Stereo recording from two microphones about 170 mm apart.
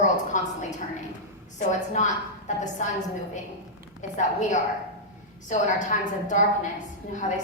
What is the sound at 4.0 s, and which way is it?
A woman's voice, 45° left (ahead or behind).